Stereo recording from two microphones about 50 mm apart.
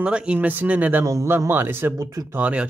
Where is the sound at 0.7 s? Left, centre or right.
Right.